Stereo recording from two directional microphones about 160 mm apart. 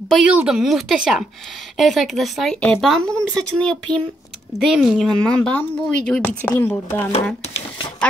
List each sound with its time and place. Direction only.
0.1 s speech: 5° right (ahead or behind)
5.4 s speech: 10° left (ahead or behind)